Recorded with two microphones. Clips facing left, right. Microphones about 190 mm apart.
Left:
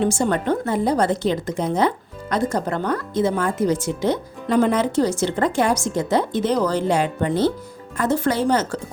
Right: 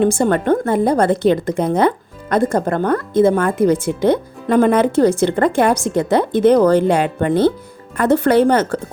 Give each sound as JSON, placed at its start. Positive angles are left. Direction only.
{"t": 0.0, "sound": "speech", "side_deg": -55}